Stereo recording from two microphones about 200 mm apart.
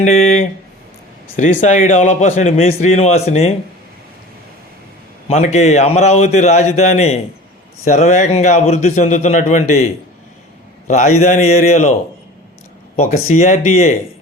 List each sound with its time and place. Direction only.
0.0 s a man's voice: 35° left (ahead or behind)
5.5 s a man's voice: 35° left (ahead or behind)
10.8 s a man's voice: 35° left (ahead or behind)
13.0 s a man's voice: 35° left (ahead or behind)